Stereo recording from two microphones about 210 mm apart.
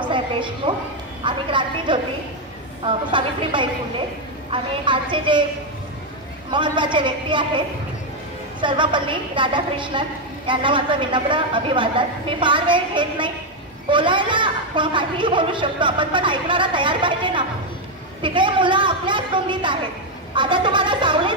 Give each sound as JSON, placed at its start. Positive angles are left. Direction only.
{"t": 0.0, "sound": "music", "side_deg": -25}
{"t": 1.2, "sound": "a woman's voice", "side_deg": -25}
{"t": 6.5, "sound": "a woman's voice", "side_deg": -20}